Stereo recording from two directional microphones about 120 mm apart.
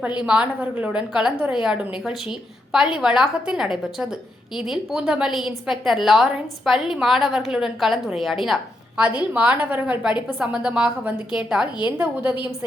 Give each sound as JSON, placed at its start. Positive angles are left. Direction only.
{"t": 0.3, "sound": "a woman's voice", "side_deg": -10}
{"t": 11.6, "sound": "a woman's voice", "side_deg": 40}
{"t": 11.9, "sound": "a woman's voice", "side_deg": -15}